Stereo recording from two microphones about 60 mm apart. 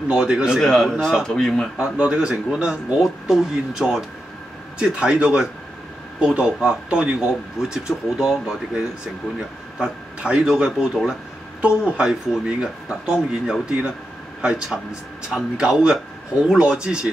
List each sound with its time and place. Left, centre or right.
0.1 s speech: centre
0.6 s speech: centre
1.8 s speech: centre